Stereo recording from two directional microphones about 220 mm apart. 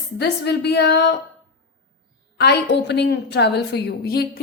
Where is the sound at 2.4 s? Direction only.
50° left (ahead or behind).